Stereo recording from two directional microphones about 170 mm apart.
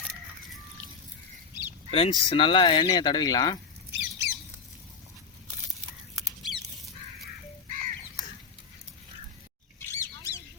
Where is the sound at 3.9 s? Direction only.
15° right (ahead or behind).